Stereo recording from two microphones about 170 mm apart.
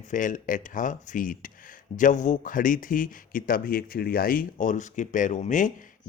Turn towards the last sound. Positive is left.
turn(degrees=45)  # may be behind; listen again after turning